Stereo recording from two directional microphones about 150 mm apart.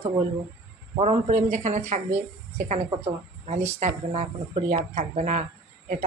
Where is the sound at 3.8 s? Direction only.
50° right (ahead or behind).